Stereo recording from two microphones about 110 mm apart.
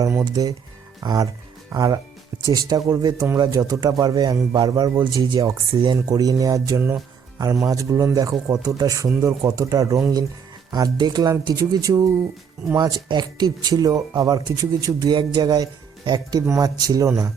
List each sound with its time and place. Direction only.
0.0 s speech: 25° right (ahead or behind)